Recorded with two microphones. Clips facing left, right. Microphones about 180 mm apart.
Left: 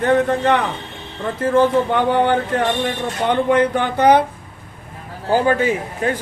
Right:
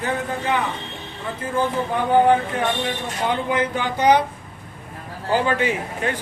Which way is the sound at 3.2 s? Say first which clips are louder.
Left 6 dB; 65° left (ahead or behind).